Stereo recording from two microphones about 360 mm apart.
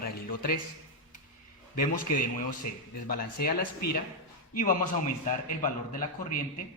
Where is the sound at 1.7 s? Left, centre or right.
Left.